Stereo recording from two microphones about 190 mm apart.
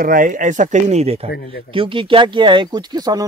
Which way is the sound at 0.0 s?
45° right (ahead or behind).